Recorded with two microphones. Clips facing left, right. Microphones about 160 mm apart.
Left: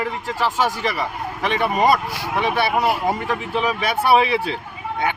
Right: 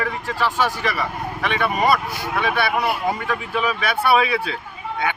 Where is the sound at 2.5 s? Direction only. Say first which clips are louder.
Left 3 dB; 40° left (ahead or behind).